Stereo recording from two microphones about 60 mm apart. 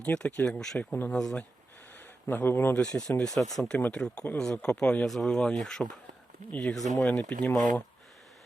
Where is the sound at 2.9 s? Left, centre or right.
Centre.